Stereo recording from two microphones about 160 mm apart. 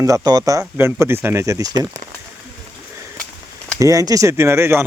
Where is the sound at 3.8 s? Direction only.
20° right (ahead or behind).